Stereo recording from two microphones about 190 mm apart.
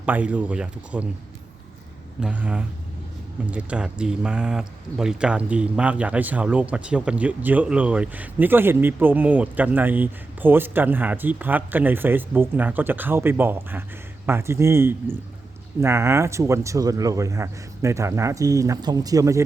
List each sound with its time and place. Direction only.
0.0 s speech: 5° right (ahead or behind)
2.2 s speech: 5° right (ahead or behind)